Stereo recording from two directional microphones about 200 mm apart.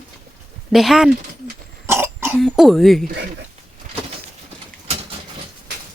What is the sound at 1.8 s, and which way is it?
Throat clearing, 10° right (ahead or behind).